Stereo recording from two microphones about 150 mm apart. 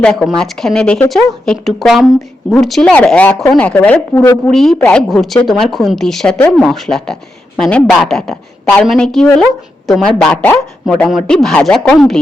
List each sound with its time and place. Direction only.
0.0 s a woman's voice: 5° left (ahead or behind)